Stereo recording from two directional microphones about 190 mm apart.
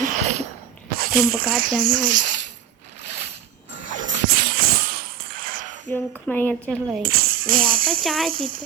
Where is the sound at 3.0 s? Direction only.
35° right (ahead or behind).